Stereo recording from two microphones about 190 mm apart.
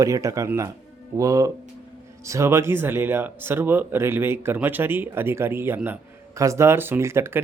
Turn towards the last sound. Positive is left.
turn(degrees=-15)  # may be behind; listen again after turning